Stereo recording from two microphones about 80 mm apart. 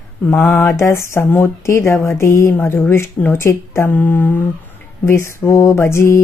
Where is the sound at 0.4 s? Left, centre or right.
Left.